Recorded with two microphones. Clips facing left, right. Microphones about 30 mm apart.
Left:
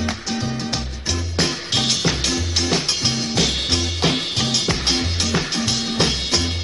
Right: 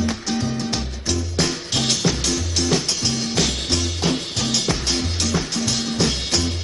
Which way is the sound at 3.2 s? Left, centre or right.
Centre.